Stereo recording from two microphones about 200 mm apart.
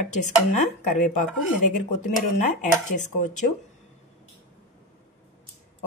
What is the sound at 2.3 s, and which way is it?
Speech, 35° left (ahead or behind).